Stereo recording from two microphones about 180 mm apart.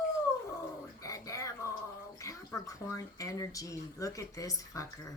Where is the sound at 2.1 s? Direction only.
15° left (ahead or behind).